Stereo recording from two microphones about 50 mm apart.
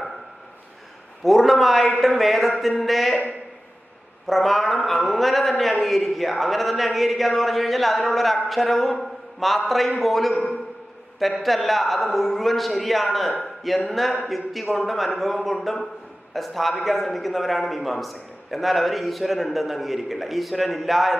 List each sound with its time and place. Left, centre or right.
1.2 s a man's voice: centre
4.3 s a man's voice: centre